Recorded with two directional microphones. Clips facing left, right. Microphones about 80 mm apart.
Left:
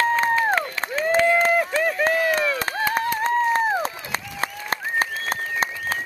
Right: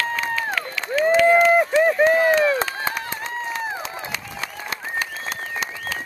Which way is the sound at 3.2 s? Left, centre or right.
Left.